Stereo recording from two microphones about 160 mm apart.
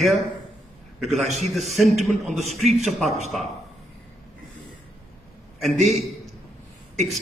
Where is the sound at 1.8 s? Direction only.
Centre (ahead or behind).